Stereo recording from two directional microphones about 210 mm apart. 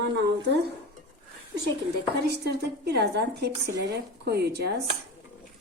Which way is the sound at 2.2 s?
50° right (ahead or behind).